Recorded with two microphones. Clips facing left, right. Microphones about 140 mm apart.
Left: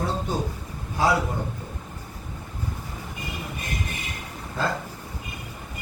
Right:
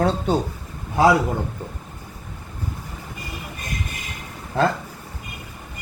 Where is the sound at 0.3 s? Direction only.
65° right (ahead or behind).